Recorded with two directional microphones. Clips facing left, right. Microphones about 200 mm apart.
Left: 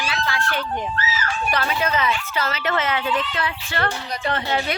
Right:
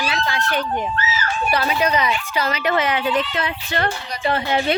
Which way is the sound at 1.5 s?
10° right (ahead or behind).